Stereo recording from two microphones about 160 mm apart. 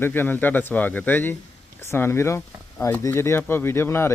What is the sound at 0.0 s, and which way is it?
Speech, 10° left (ahead or behind).